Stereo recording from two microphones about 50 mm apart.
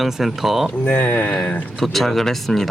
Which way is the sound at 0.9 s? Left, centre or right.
Left.